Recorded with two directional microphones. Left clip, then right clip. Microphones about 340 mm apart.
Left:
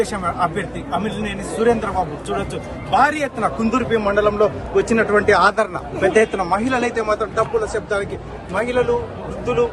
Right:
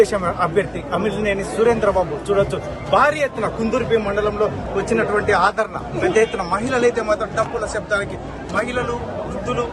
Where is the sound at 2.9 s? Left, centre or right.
Centre.